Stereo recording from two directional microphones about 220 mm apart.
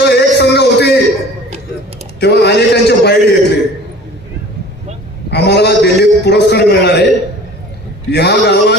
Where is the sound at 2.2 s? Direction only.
50° left (ahead or behind).